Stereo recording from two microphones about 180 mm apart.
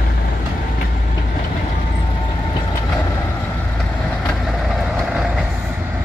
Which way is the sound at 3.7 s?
5° left (ahead or behind).